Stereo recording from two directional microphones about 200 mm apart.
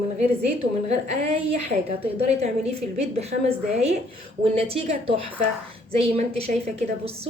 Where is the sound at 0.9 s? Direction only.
30° right (ahead or behind).